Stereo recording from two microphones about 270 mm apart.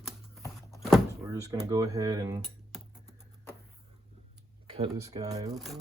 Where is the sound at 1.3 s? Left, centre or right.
Centre.